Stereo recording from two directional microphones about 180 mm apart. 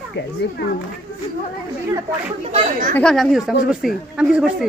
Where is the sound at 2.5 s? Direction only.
40° right (ahead or behind).